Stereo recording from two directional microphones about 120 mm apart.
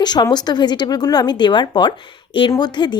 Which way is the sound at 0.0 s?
35° left (ahead or behind).